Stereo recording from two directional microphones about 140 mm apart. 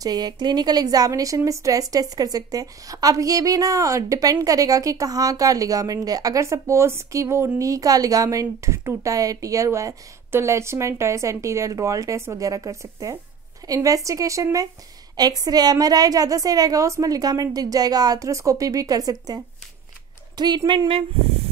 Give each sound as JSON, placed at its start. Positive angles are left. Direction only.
{"t": 0.0, "sound": "a woman's voice", "side_deg": -30}